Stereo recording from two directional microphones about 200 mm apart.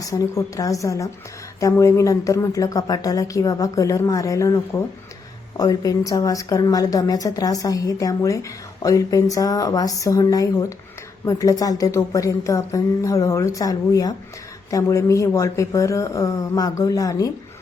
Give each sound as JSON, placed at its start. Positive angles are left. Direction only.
{"t": 0.0, "sound": "speech", "side_deg": 15}